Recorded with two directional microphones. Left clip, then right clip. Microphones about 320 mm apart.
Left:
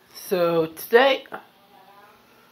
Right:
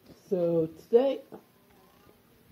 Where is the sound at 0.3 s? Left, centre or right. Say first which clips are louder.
Left 6 dB; centre.